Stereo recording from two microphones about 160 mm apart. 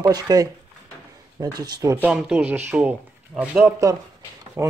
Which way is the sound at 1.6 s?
25° right (ahead or behind).